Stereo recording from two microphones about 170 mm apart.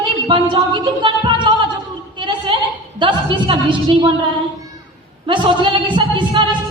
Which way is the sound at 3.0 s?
30° right (ahead or behind).